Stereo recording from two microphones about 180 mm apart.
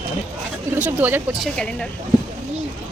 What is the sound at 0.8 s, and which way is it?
Speech, 10° right (ahead or behind).